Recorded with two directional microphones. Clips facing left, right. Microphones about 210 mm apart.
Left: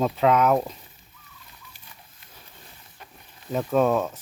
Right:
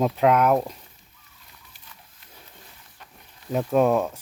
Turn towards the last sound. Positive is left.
turn(degrees=-10)  # may be behind; listen again after turning